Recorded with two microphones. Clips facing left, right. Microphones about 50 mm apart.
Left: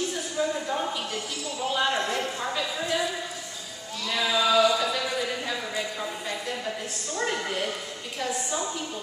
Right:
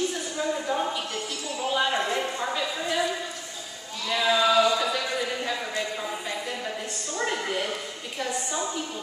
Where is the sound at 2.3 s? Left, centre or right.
Centre.